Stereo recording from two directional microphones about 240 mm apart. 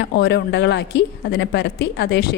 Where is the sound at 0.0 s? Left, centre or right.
Left.